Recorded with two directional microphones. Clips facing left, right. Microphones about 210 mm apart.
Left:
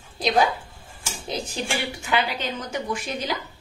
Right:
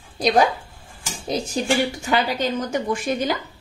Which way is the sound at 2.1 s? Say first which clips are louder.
Right 1 dB; 45° right (ahead or behind).